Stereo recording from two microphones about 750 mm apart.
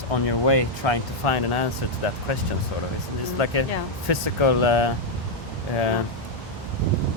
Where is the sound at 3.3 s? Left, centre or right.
Left.